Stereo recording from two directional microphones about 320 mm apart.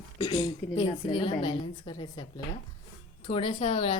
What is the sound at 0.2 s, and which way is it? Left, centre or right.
A woman's voice, centre.